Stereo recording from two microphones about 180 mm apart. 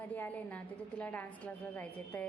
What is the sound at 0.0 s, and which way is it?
A woman's voice, 10° left (ahead or behind).